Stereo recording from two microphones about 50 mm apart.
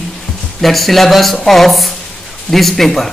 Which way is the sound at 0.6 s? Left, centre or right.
Centre.